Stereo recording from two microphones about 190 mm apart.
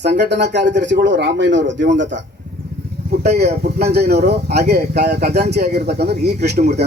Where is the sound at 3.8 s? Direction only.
60° right (ahead or behind).